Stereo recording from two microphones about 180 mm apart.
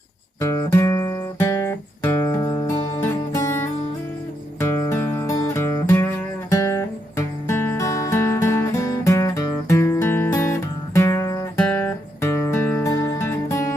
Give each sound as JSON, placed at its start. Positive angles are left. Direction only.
{"t": 0.3, "sound": "guitar", "side_deg": 15}
{"t": 3.0, "sound": "music", "side_deg": 15}